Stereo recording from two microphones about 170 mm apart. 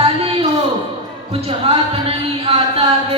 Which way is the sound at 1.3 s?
35° right (ahead or behind).